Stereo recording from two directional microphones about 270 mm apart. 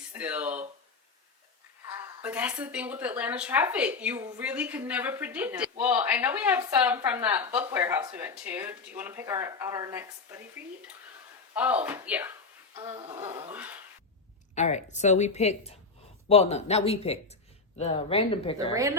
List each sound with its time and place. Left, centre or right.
0.1 s speech: centre
1.9 s speech: centre
14.5 s speech: left
18.7 s speech: centre